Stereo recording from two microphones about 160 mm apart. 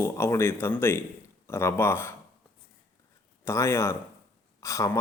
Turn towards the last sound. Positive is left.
turn(degrees=20)  # may be behind; listen again after turning